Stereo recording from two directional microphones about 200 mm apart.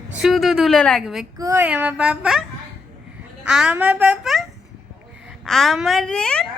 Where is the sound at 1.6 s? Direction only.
10° right (ahead or behind).